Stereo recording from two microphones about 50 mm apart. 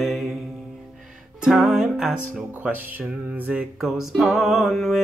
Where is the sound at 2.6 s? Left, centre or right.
Right.